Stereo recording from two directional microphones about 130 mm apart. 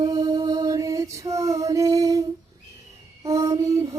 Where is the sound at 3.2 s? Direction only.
25° right (ahead or behind).